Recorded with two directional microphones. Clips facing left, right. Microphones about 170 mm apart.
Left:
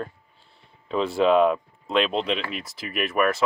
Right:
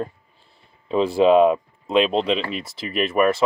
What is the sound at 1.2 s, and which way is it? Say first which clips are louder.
Speech: right 4 dB; 5° right (ahead or behind).